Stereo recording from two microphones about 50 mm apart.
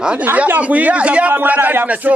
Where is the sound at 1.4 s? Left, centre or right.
Right.